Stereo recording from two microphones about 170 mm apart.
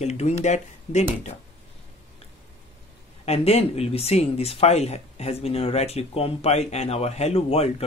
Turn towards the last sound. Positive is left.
turn(degrees=35)  # may be behind; listen again after turning